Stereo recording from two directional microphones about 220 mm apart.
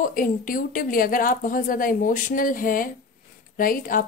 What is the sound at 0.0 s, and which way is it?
A woman's voice, 40° left (ahead or behind).